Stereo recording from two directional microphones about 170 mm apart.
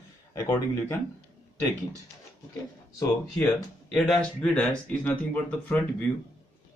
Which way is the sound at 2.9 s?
20° left (ahead or behind).